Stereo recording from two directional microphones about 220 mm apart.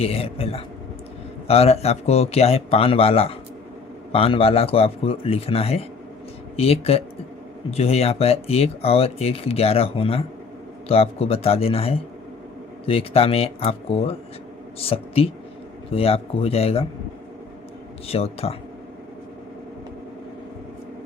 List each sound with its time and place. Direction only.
0.0 s speech: 25° left (ahead or behind)
18.1 s speech: 25° left (ahead or behind)